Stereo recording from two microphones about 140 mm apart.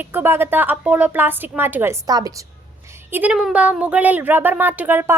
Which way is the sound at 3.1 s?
10° right (ahead or behind).